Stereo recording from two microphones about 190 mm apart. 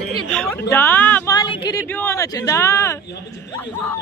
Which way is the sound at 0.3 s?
5° left (ahead or behind).